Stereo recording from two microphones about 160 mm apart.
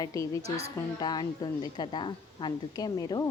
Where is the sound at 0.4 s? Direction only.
40° right (ahead or behind).